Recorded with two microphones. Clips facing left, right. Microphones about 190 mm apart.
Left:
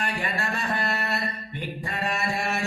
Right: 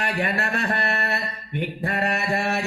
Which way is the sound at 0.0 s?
65° right (ahead or behind).